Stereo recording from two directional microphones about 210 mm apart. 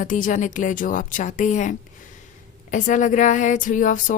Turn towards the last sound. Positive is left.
turn(degrees=40)  # may be behind; listen again after turning